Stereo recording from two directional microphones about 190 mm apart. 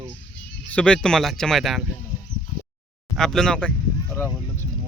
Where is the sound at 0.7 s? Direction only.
5° left (ahead or behind).